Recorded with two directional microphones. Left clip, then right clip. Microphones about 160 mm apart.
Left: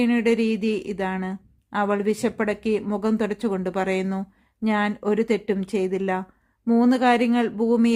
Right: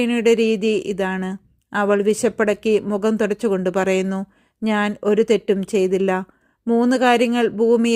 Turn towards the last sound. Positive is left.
turn(degrees=-30)  # may be behind; listen again after turning